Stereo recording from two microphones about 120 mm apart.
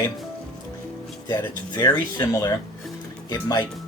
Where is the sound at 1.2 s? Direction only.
30° left (ahead or behind).